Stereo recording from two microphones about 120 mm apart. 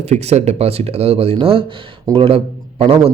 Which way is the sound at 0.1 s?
65° right (ahead or behind).